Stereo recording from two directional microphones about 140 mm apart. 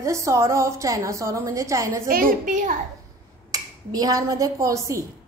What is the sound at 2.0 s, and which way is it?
Speech, 90° right.